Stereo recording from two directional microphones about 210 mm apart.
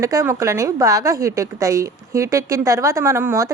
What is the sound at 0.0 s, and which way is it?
A woman's voice, 15° right (ahead or behind).